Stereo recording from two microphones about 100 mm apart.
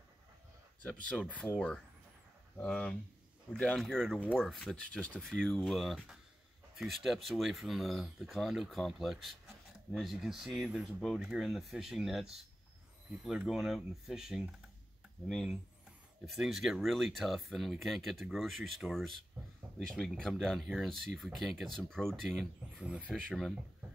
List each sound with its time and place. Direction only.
0.8 s speech: 10° left (ahead or behind)
2.5 s speech: 10° left (ahead or behind)
20.2 s speech: 5° left (ahead or behind)
22.8 s speech: 10° right (ahead or behind)
23.0 s speech: centre (ahead or behind)